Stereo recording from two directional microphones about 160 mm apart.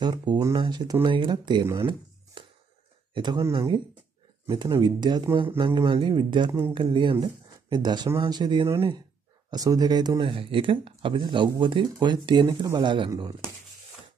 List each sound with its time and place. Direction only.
0.0 s speech: 25° right (ahead or behind)
2.4 s music: 30° right (ahead or behind)
3.2 s speech: 25° right (ahead or behind)